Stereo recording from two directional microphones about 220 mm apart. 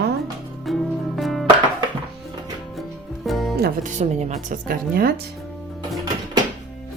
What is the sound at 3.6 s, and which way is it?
Speech, 35° right (ahead or behind).